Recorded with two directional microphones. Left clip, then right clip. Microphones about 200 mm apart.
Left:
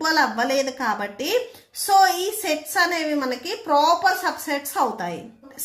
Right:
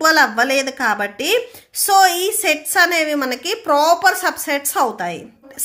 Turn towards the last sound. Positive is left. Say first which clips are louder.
# right 5 dB
turn(degrees=-30)  # may be behind; listen again after turning